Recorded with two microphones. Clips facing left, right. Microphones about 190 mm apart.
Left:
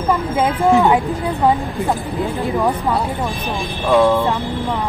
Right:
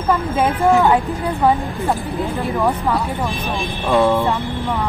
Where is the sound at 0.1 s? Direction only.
15° left (ahead or behind).